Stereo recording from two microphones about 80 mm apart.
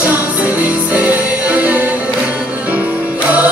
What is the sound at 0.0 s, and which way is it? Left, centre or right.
Music, centre.